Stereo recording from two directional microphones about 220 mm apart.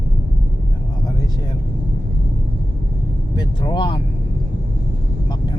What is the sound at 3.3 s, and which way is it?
Vehicle, 20° left (ahead or behind).